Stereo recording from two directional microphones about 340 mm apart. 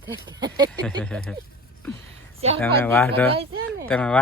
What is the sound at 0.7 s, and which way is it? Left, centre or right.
Speech, centre.